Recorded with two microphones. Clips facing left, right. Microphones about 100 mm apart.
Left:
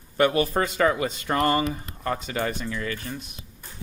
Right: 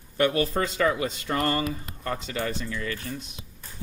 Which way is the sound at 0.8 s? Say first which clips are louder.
Left 2 dB; 55° left (ahead or behind).